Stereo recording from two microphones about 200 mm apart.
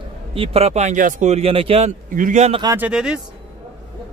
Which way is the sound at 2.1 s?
40° right (ahead or behind).